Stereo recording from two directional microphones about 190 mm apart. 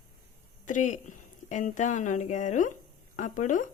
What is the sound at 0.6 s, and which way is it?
A woman's voice, 40° left (ahead or behind).